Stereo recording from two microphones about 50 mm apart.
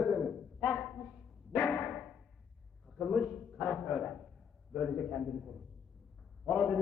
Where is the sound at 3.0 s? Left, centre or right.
Centre.